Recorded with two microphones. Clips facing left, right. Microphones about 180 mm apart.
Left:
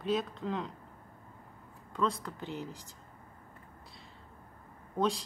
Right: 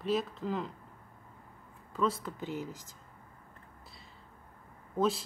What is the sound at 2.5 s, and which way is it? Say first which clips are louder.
Speech: right 2 dB; 45° right (ahead or behind).